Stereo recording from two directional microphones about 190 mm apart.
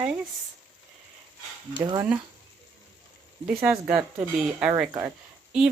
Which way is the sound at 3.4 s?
5° right (ahead or behind).